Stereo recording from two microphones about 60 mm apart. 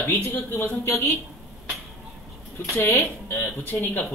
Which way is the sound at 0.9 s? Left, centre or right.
Left.